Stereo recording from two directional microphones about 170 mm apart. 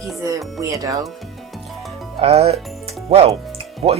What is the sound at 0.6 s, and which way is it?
Speech, 20° right (ahead or behind).